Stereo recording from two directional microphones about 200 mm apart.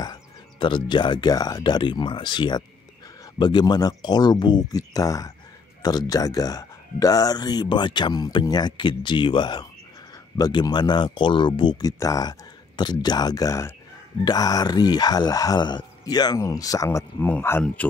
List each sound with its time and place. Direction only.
0.0 s speech: 20° left (ahead or behind)